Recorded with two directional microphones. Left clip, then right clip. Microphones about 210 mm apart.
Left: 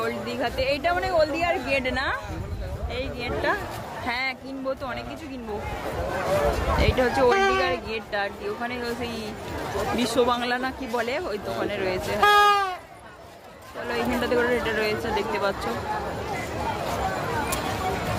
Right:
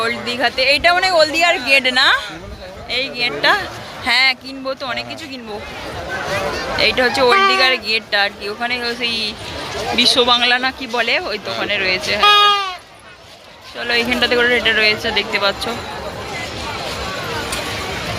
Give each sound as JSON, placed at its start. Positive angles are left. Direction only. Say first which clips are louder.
{"t": 0.0, "sound": "speech", "louder": "right 9 dB", "side_deg": -5}
{"t": 6.7, "sound": "speech", "louder": "right 10 dB", "side_deg": 5}
{"t": 12.2, "sound": "a sound", "louder": "right 6 dB", "side_deg": 20}
{"t": 13.8, "sound": "speech", "louder": "right 10 dB", "side_deg": -5}